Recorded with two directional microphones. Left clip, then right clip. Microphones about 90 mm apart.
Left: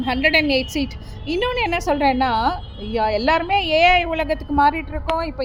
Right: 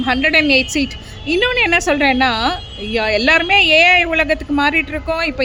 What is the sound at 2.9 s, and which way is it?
A woman's voice, 25° right (ahead or behind).